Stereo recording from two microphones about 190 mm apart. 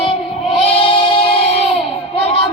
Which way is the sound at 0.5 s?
30° left (ahead or behind).